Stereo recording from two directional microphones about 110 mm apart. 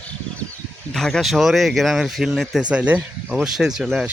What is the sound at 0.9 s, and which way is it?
Speech, 5° left (ahead or behind).